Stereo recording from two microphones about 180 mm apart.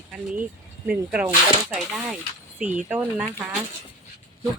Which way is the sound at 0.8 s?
5° right (ahead or behind).